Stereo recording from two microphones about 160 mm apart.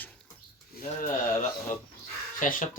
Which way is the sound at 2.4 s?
55° left (ahead or behind).